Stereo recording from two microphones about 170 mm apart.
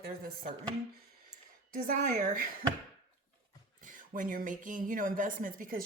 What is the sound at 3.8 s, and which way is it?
A woman's voice, 50° right (ahead or behind).